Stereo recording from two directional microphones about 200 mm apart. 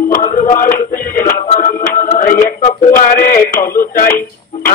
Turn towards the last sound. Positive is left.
turn(degrees=45)  # may be behind; listen again after turning